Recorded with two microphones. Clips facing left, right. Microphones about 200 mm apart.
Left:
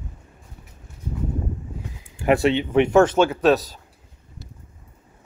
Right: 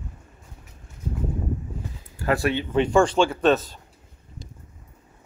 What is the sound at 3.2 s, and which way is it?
Speech, 5° left (ahead or behind).